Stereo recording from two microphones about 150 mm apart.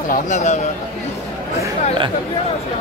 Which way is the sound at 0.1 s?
55° left (ahead or behind).